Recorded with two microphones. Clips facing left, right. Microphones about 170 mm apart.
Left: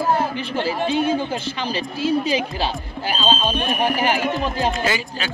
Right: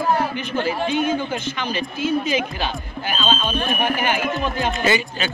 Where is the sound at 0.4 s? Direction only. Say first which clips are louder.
Even; 30° left (ahead or behind).